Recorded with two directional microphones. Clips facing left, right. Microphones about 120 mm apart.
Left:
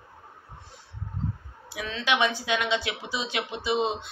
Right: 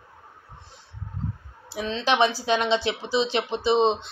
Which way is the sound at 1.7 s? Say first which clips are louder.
Right 4 dB; 30° right (ahead or behind).